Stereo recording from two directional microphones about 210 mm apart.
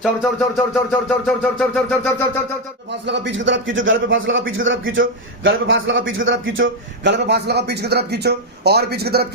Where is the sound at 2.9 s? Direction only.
55° right (ahead or behind).